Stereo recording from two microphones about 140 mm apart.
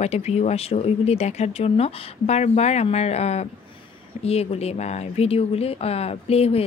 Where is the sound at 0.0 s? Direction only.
50° left (ahead or behind).